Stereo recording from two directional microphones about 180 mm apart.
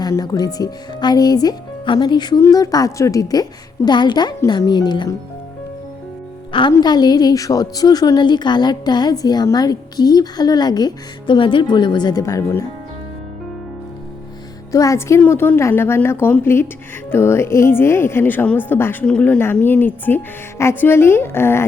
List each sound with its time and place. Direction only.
0.0 s a woman's voice: 20° left (ahead or behind)
6.5 s a woman's voice: 25° left (ahead or behind)
14.7 s a woman's voice: 15° left (ahead or behind)